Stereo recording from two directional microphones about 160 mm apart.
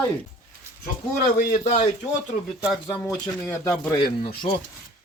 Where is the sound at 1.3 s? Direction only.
55° left (ahead or behind).